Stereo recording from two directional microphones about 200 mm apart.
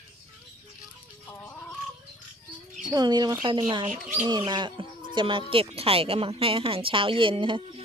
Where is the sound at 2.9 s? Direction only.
20° right (ahead or behind).